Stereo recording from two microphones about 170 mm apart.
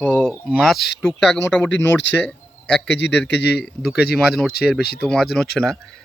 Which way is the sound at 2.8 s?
90° left.